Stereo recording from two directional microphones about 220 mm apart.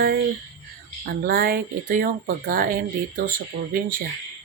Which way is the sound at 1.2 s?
45° right (ahead or behind).